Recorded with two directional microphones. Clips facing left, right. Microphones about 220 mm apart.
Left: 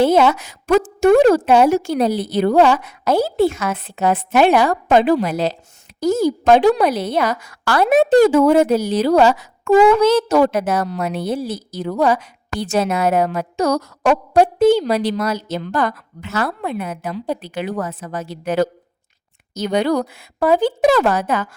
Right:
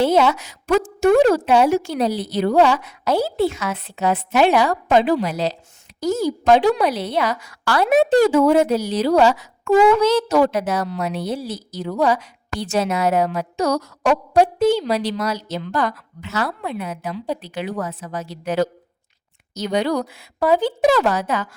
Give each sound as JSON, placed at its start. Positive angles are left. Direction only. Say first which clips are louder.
{"t": 0.0, "sound": "a woman's voice", "louder": "left 3 dB", "side_deg": 50}